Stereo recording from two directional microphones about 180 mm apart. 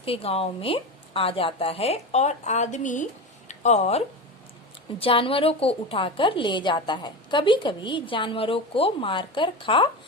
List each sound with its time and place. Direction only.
0.0 s a woman's voice: 35° left (ahead or behind)